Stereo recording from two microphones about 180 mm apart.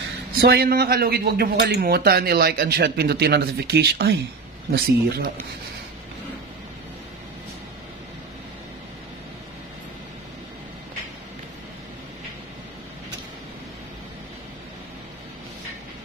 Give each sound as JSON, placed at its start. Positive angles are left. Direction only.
{"t": 0.4, "sound": "speech", "side_deg": -60}